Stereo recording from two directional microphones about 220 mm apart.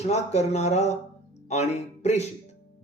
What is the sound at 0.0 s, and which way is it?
Speech, 30° left (ahead or behind).